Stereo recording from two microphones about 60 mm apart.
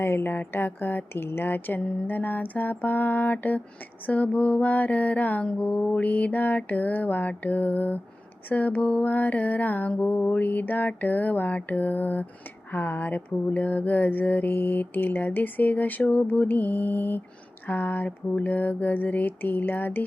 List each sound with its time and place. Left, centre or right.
0.0 s mantra: left